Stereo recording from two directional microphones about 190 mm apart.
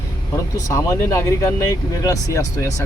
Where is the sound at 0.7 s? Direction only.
15° left (ahead or behind).